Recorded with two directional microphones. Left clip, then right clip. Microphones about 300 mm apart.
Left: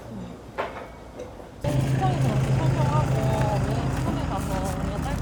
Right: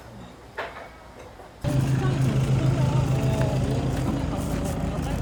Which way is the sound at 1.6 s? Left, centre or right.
Centre.